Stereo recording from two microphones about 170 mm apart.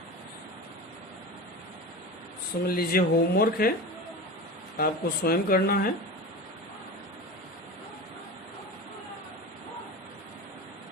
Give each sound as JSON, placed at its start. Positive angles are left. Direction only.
{"t": 2.6, "sound": "speech", "side_deg": 60}
{"t": 4.8, "sound": "speech", "side_deg": 60}